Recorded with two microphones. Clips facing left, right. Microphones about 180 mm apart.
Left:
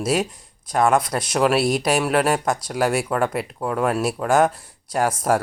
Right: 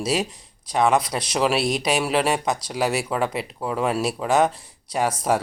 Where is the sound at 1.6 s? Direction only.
55° left (ahead or behind).